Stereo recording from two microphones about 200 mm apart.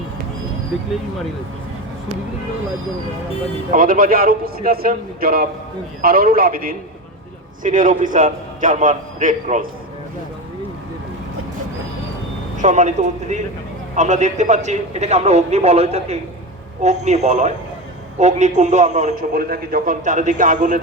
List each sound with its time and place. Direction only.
3.7 s a man's voice: 45° right (ahead or behind)
12.5 s a man's voice: 40° right (ahead or behind)